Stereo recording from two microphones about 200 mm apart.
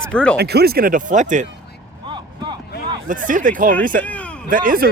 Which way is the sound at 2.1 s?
20° right (ahead or behind).